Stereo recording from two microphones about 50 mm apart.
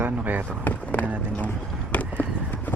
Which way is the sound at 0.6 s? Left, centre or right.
Left.